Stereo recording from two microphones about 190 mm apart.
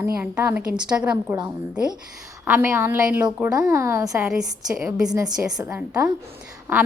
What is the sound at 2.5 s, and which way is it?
A woman's voice, 10° right (ahead or behind).